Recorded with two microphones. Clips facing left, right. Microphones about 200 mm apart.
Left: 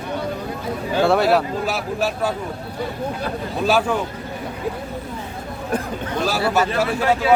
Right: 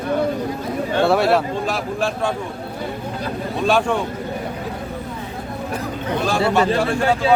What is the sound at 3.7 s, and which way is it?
Speech, 5° left (ahead or behind).